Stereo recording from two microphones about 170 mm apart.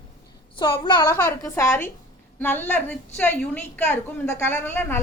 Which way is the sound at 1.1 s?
15° left (ahead or behind).